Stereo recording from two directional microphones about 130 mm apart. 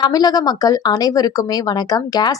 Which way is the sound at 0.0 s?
30° left (ahead or behind).